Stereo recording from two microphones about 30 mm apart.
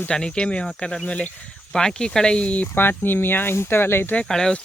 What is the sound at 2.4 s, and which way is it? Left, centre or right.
Speech, left.